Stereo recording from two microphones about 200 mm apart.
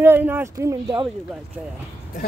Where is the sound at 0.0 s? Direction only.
10° right (ahead or behind).